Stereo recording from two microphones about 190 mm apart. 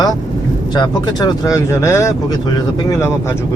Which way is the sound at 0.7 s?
20° left (ahead or behind).